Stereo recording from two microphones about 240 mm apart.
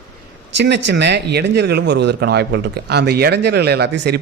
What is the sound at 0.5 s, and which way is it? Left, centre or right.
Speech, right.